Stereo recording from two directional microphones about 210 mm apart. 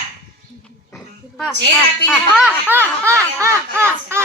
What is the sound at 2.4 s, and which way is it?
Speech, 10° right (ahead or behind).